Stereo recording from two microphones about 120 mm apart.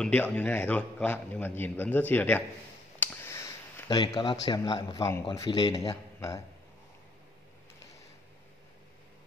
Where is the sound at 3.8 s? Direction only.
35° left (ahead or behind).